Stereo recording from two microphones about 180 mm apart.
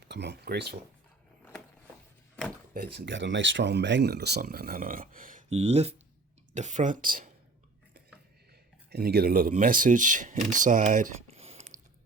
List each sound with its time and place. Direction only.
0.1 s speech: 70° right (ahead or behind)
2.7 s speech: 60° right (ahead or behind)
8.9 s speech: 60° right (ahead or behind); by 11.8 s 40° right (ahead or behind)